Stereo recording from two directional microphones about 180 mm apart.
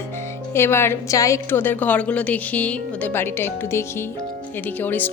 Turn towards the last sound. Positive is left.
turn(degrees=10)  # may be behind; listen again after turning